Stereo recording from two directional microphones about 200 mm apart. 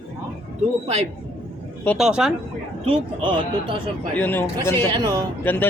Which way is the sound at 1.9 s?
Centre (ahead or behind).